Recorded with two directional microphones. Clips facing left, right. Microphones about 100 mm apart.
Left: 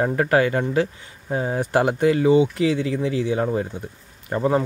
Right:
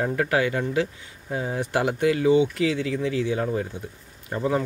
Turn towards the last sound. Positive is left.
turn(degrees=50)  # may be behind; listen again after turning